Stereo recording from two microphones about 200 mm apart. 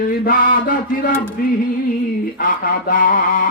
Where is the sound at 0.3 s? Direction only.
45° left (ahead or behind).